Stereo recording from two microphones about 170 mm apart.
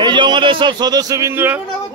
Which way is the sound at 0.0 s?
30° right (ahead or behind).